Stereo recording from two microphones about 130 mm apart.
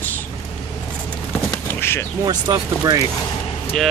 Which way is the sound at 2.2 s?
25° right (ahead or behind).